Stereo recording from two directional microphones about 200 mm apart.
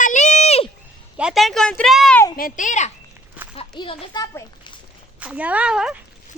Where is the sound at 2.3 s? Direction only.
45° left (ahead or behind); by 4.7 s 20° left (ahead or behind).